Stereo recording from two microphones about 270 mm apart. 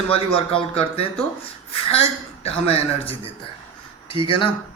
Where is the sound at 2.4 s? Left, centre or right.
Left.